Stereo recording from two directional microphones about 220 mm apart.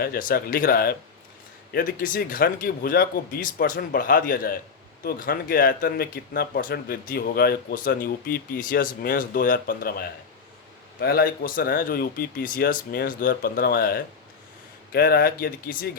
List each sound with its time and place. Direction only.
0.0 s speech: 40° left (ahead or behind)